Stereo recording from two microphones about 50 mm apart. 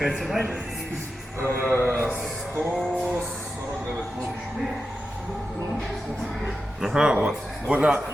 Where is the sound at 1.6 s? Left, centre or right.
Right.